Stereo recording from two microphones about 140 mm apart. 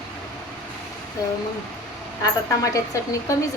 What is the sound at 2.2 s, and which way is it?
A woman's voice, 25° left (ahead or behind).